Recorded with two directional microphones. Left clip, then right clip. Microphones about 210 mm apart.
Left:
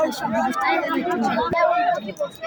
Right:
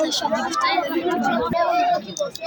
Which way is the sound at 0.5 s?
40° left (ahead or behind).